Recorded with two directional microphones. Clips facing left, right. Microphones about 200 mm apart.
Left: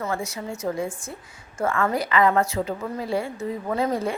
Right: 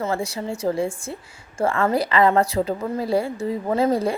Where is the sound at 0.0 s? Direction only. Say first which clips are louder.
Right 4 dB; 30° right (ahead or behind).